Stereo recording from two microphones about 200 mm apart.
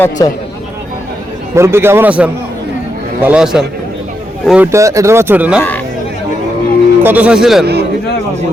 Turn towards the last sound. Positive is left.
turn(degrees=-55)  # may be behind; listen again after turning